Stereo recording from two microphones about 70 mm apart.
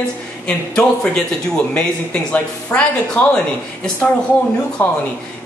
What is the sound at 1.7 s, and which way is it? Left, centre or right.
A man's voice, left.